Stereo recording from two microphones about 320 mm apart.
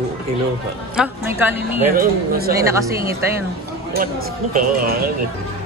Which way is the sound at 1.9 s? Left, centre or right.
Right.